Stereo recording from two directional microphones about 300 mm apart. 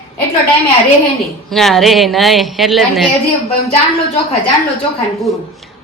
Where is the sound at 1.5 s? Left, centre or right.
Centre.